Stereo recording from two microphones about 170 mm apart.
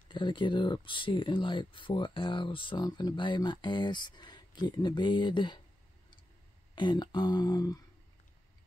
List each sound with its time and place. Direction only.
0.1 s speech: 30° left (ahead or behind)
6.7 s speech: 25° left (ahead or behind)